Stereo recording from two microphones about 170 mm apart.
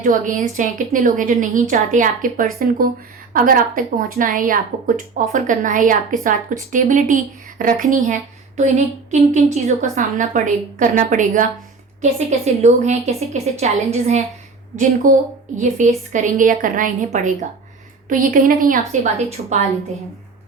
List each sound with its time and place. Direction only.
0.0 s a woman's voice: 50° right (ahead or behind)
15.1 s a woman's voice: 50° right (ahead or behind)